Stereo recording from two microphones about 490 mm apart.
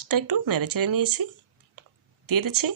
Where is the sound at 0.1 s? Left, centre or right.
Right.